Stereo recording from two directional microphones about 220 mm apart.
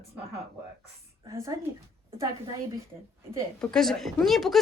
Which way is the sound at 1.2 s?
15° right (ahead or behind).